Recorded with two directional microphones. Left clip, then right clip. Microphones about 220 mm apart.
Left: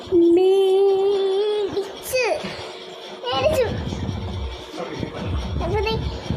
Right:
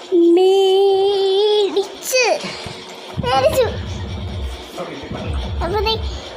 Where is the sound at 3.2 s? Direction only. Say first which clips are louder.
Right 7 dB; 20° right (ahead or behind).